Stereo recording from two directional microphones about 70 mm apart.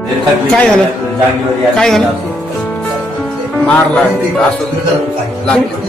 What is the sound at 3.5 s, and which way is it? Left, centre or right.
Speech, left.